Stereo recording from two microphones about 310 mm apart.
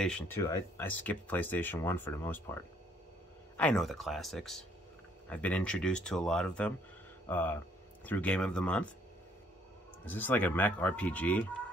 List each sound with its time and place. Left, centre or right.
0.0 s speech: centre
10.0 s speech: centre